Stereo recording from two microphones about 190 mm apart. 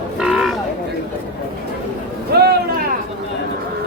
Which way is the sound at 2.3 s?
55° right (ahead or behind).